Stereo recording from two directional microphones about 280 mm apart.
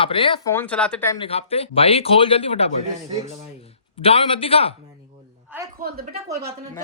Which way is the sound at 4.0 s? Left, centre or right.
Centre.